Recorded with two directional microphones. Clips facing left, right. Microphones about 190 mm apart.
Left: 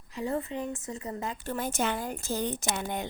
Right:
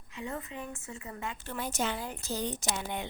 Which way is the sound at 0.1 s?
35° left (ahead or behind).